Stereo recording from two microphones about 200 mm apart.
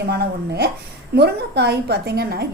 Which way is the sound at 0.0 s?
55° right (ahead or behind).